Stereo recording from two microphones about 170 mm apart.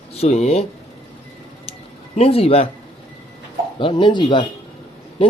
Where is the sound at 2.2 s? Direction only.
35° left (ahead or behind).